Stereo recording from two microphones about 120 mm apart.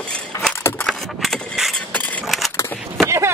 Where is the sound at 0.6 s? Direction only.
20° left (ahead or behind).